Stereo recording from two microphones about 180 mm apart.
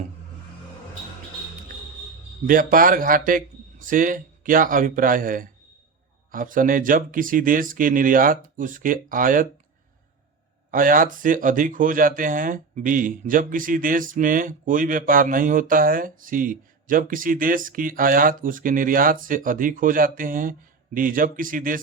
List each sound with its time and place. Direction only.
2.5 s speech: 50° right (ahead or behind)
10.7 s speech: 50° right (ahead or behind)